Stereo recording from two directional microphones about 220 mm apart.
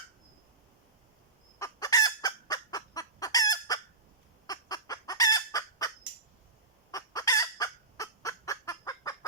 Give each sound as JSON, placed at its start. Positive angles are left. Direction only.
{"t": 1.5, "sound": "fowl", "side_deg": 15}
{"t": 6.9, "sound": "fowl", "side_deg": 15}